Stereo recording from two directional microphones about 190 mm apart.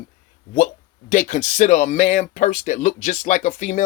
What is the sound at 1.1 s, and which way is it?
Speech, 40° left (ahead or behind).